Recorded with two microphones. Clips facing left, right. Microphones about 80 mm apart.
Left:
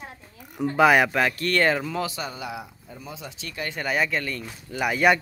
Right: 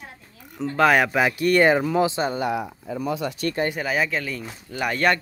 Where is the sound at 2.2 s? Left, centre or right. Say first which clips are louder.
Right 9 dB; right.